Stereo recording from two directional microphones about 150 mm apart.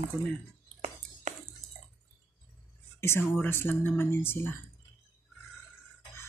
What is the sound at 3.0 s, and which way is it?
Speech, 15° left (ahead or behind).